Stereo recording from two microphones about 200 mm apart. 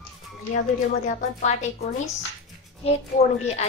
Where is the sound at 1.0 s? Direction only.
35° left (ahead or behind).